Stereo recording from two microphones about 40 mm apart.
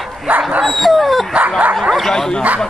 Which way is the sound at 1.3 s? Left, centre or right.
Right.